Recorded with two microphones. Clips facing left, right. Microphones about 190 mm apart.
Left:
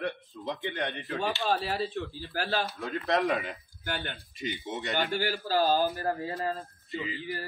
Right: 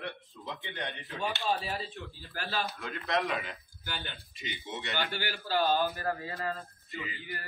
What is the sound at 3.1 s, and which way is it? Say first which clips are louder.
Speech: left 4 dB; 35° left (ahead or behind).